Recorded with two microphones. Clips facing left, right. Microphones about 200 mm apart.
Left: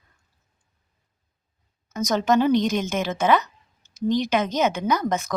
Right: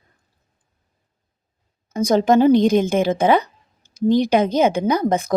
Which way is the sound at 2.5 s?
55° right (ahead or behind).